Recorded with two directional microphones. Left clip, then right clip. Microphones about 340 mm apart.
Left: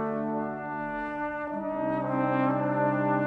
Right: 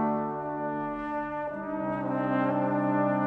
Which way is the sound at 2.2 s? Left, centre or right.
Centre.